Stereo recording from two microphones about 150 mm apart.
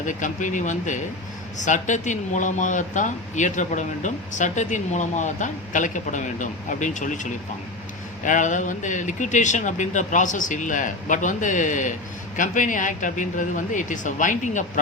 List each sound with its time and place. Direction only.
0.0 s a man's voice: 55° left (ahead or behind)